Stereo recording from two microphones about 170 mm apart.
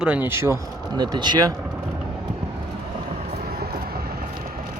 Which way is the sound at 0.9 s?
25° right (ahead or behind).